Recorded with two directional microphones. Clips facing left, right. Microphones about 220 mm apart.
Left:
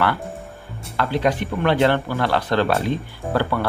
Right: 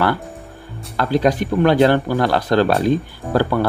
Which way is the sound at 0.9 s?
40° right (ahead or behind).